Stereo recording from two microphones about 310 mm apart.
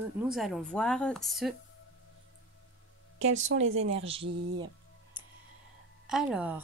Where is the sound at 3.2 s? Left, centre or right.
Right.